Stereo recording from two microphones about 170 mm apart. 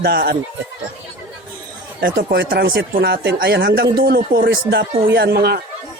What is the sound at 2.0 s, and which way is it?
Speech, 75° right (ahead or behind).